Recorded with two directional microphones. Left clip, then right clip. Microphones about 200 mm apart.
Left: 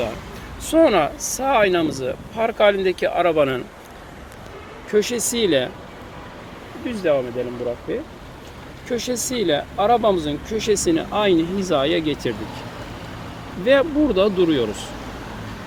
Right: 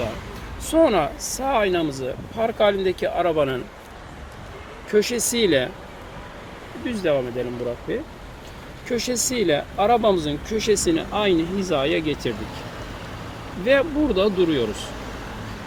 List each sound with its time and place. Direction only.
0.7 s speech: centre (ahead or behind)
4.9 s speech: 5° left (ahead or behind)
6.8 s speech: 5° right (ahead or behind)
9.0 s speech: 45° left (ahead or behind)
9.5 s speech: centre (ahead or behind); by 12.3 s 20° left (ahead or behind)
13.7 s speech: 20° left (ahead or behind)